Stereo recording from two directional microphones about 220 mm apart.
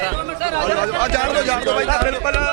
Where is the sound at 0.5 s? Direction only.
15° right (ahead or behind).